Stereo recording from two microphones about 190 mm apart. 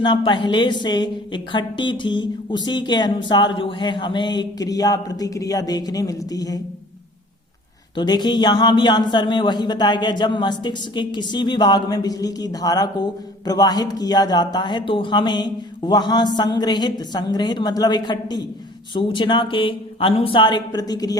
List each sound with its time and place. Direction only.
0.0 s speech: 25° left (ahead or behind)
7.9 s speech: 20° left (ahead or behind)